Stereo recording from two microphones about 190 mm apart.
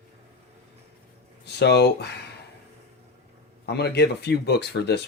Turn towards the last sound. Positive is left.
turn(degrees=60)  # may be behind; listen again after turning